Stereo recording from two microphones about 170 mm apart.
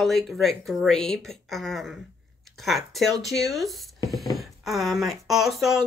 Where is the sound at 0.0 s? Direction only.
Centre (ahead or behind).